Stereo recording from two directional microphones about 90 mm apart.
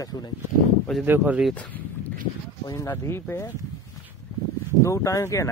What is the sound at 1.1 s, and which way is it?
Speech, 15° right (ahead or behind).